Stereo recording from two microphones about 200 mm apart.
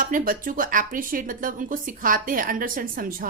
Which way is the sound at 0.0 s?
45° right (ahead or behind).